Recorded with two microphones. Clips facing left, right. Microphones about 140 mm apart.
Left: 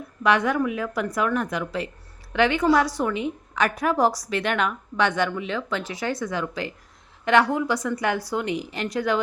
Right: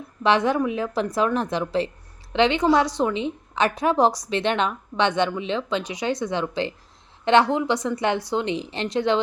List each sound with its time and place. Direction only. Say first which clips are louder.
0.2 s a woman's voice: right 1 dB; 25° right (ahead or behind)